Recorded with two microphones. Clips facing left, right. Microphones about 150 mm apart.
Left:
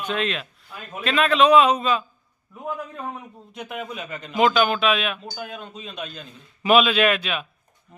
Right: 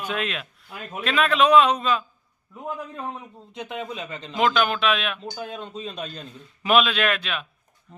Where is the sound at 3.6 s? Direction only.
25° right (ahead or behind).